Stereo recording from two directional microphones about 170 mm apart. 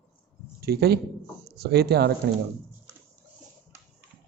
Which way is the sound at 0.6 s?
70° right (ahead or behind).